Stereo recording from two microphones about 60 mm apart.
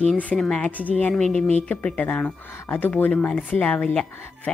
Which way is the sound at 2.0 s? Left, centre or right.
Left.